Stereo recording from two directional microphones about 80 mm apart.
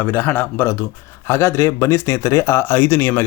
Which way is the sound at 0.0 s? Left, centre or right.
Left.